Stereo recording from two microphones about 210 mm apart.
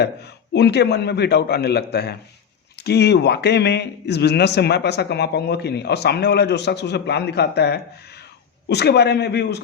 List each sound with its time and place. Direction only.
0.0 s speech: 55° left (ahead or behind)